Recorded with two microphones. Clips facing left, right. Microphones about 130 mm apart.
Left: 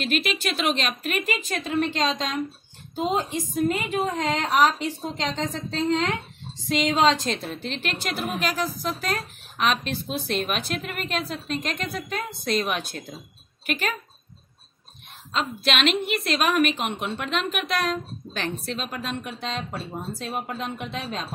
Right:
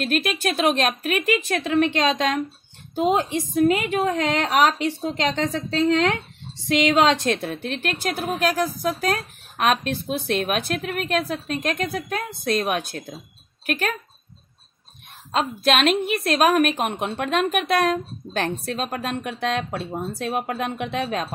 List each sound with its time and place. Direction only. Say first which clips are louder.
0.0 s a woman's voice: right 3 dB; 45° right (ahead or behind)
15.3 s a woman's voice: right 5 dB; 45° right (ahead or behind)